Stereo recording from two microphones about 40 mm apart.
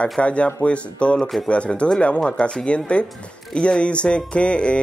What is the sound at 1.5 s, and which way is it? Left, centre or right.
Speech, left.